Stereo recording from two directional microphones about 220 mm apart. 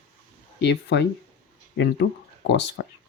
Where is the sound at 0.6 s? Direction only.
50° left (ahead or behind).